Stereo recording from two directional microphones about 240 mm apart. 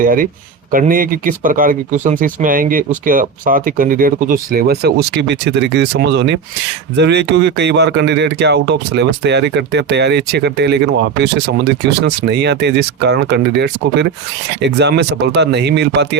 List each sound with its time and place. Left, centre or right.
0.0 s speech: right